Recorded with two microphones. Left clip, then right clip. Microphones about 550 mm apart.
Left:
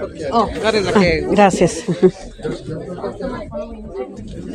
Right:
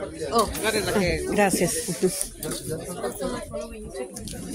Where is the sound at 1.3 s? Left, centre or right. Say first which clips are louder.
Left 9 dB; right.